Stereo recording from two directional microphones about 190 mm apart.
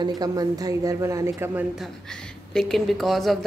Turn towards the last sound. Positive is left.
turn(degrees=0)  # may be behind; listen again after turning